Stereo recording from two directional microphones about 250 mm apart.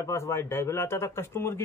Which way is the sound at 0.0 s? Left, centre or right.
Centre.